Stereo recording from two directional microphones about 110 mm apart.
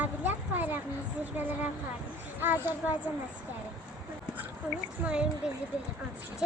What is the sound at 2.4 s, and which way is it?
Speech, 20° right (ahead or behind).